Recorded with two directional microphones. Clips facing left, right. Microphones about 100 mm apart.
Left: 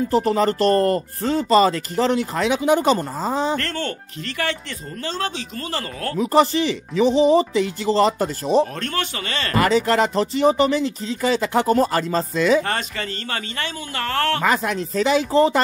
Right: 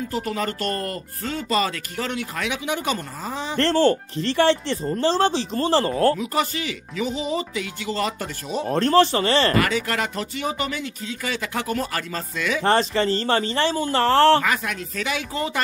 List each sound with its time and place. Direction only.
0.1 s speech: 35° left (ahead or behind)
3.5 s speech: 30° right (ahead or behind)
6.1 s speech: 35° left (ahead or behind)
8.6 s speech: 30° right (ahead or behind)
9.6 s speech: 30° left (ahead or behind)
12.6 s speech: 30° right (ahead or behind)
14.4 s speech: 30° left (ahead or behind)